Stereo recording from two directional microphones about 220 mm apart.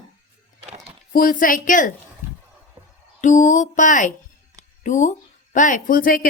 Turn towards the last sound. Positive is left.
turn(degrees=40)  # may be behind; listen again after turning